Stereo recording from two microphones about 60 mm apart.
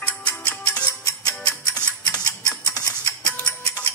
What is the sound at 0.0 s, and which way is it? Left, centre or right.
Music, left.